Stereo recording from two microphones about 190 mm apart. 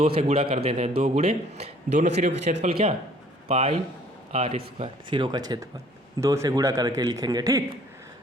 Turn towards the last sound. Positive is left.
turn(degrees=-20)  # may be behind; listen again after turning